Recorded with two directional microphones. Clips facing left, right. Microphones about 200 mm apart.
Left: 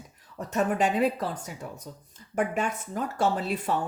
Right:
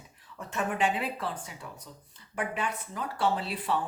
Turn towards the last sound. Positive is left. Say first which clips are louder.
# left 3 dB
turn(degrees=45)  # may be behind; listen again after turning